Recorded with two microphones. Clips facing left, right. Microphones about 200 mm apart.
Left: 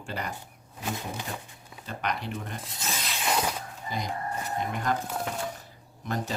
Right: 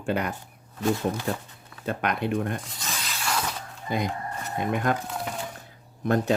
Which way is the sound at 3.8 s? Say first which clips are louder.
Right 5 dB; 55° right (ahead or behind).